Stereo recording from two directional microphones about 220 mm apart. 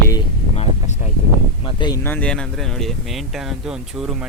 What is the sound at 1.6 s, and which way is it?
Speech, 20° left (ahead or behind).